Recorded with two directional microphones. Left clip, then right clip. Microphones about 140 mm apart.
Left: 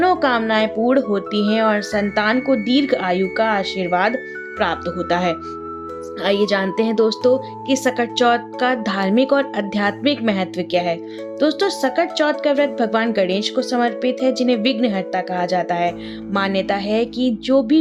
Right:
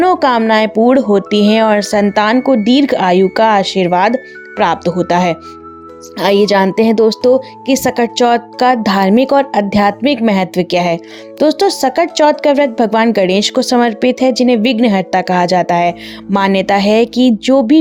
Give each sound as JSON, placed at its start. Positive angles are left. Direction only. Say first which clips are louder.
{"t": 0.0, "sound": "speech", "louder": "right 6 dB", "side_deg": -50}